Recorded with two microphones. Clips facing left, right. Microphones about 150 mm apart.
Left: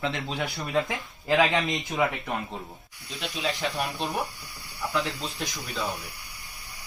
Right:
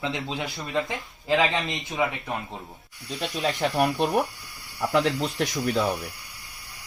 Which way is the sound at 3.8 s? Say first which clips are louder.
Right 7 dB; 60° right (ahead or behind).